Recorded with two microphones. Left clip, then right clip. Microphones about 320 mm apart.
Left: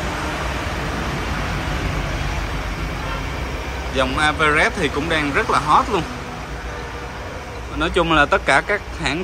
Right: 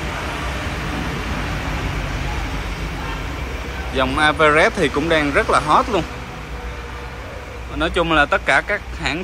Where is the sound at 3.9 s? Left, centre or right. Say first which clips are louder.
Right 2 dB; centre.